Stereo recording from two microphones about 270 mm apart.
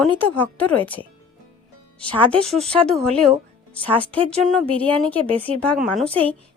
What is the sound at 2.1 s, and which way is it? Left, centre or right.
Speech, centre.